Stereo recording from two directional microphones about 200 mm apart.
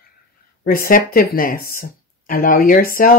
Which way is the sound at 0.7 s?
45° left (ahead or behind).